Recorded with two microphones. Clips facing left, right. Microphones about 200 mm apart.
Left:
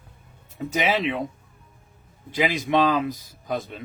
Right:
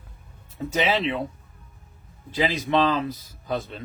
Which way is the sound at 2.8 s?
15° left (ahead or behind).